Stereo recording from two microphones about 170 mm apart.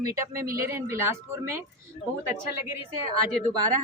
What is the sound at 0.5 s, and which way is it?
Speech, 15° right (ahead or behind).